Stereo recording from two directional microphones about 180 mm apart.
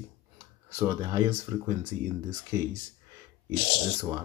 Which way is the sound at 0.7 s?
15° right (ahead or behind).